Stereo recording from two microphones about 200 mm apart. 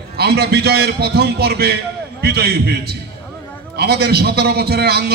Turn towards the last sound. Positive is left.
turn(degrees=-50)  # may be behind; listen again after turning